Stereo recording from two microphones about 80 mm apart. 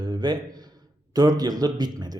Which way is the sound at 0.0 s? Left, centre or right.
Right.